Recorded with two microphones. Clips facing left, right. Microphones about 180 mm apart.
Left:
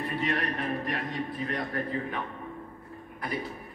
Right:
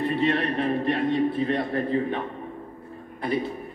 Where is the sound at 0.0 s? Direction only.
25° right (ahead or behind).